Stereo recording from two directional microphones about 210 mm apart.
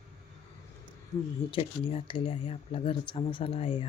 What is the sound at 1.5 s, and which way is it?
Speech, 25° left (ahead or behind).